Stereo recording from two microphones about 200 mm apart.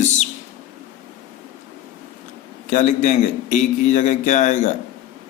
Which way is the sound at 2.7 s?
35° left (ahead or behind).